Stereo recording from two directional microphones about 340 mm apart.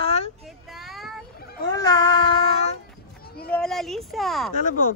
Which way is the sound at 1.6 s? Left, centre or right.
Centre.